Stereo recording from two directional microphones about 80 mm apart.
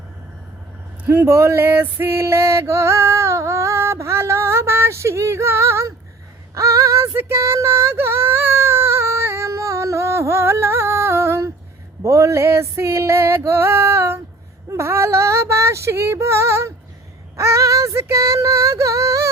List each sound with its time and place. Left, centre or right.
1.0 s male singing: right
6.5 s female singing: right
12.0 s a sound: right
14.7 s female singing: right